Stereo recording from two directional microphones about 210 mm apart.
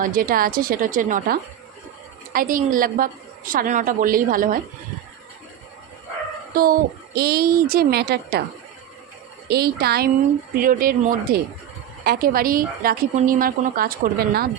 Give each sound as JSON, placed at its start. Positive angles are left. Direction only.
{"t": 0.0, "sound": "a woman's voice", "side_deg": -40}
{"t": 6.5, "sound": "a woman's voice", "side_deg": -45}
{"t": 9.5, "sound": "a woman's voice", "side_deg": -50}